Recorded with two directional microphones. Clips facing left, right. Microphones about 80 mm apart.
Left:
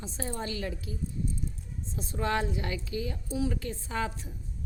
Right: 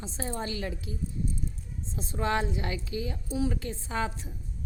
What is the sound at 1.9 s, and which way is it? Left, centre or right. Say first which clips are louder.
Speech: right 1 dB; right.